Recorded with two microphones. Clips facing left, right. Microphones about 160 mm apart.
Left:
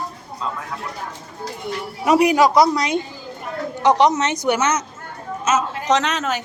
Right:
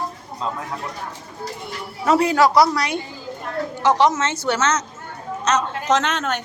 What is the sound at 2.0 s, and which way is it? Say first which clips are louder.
A woman's voice: left 2 dB; 15° left (ahead or behind).